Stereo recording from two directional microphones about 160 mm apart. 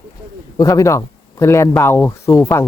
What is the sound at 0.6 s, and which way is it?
Speech, 20° left (ahead or behind).